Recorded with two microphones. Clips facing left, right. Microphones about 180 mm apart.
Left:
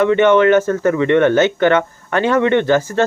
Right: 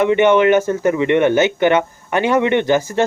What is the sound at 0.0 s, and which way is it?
Speech, 15° right (ahead or behind).